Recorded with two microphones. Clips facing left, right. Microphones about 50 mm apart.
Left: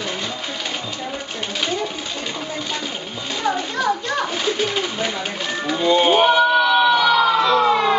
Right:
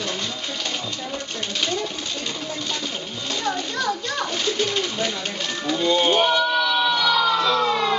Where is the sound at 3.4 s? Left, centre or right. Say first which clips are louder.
Left 5 dB; centre.